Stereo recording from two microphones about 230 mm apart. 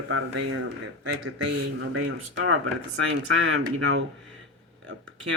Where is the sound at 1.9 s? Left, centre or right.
Right.